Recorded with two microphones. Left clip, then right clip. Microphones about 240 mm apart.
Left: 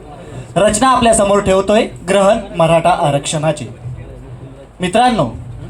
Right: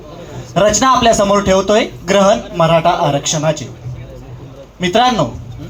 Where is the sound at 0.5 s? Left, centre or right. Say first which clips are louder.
Even; left.